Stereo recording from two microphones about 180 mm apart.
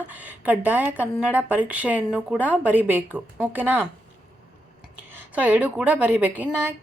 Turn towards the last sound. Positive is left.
turn(degrees=-10)  # may be behind; listen again after turning